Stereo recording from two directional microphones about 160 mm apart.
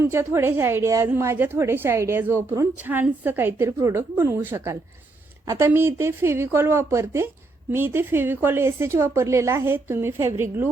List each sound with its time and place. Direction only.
0.0 s a woman's voice: 15° right (ahead or behind)